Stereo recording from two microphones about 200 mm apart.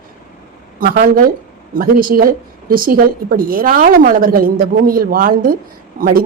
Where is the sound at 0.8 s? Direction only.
45° right (ahead or behind).